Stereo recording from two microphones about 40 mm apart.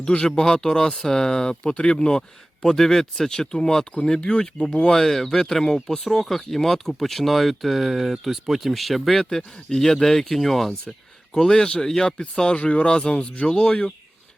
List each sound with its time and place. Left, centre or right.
0.0 s speech: left
2.6 s speech: centre; by 4.7 s left
4.8 s speech: centre
9.3 s speech: centre
12.0 s speech: left